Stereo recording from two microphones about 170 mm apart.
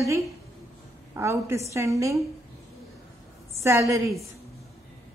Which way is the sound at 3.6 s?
15° right (ahead or behind).